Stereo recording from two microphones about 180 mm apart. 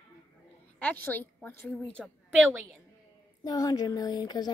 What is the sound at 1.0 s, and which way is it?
Speech, 10° left (ahead or behind).